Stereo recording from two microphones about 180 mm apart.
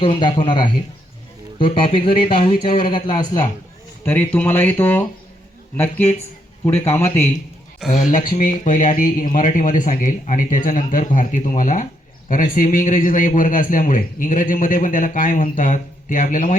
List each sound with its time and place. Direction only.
0.0 s speech: 25° left (ahead or behind)
4.0 s speech: 10° left (ahead or behind)
7.8 s speech: centre (ahead or behind)
8.1 s a man's voice: 50° left (ahead or behind)